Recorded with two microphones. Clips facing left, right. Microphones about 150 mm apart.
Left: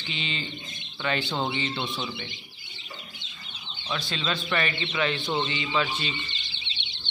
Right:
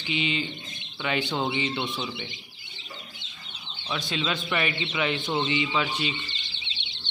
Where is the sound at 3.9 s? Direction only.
15° right (ahead or behind).